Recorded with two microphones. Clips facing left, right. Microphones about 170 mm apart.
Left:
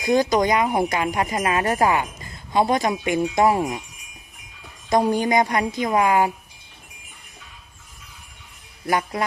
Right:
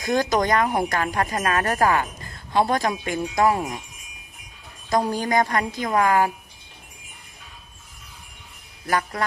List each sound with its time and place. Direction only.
0.0 s speech: 15° left (ahead or behind)
5.0 s speech: 20° left (ahead or behind)
8.9 s speech: 15° left (ahead or behind)